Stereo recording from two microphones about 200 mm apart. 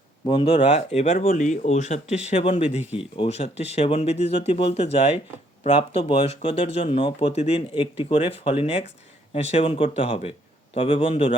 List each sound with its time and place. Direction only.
0.3 s speech: 25° left (ahead or behind)